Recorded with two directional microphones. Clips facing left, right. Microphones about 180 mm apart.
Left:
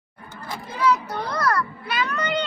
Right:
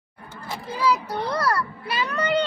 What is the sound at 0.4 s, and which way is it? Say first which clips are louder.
A child's voice: left 1 dB; 30° right (ahead or behind).